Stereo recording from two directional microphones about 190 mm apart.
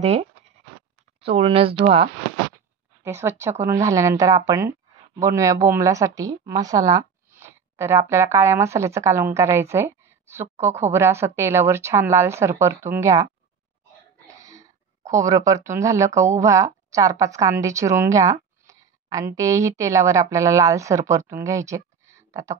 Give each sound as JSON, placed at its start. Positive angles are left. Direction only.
{"t": 0.0, "sound": "speech", "side_deg": -35}
{"t": 3.0, "sound": "a woman's voice", "side_deg": -15}
{"t": 14.2, "sound": "a sound", "side_deg": -15}
{"t": 16.3, "sound": "a woman's voice", "side_deg": -15}